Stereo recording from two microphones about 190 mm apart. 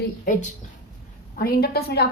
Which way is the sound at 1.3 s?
55° left (ahead or behind).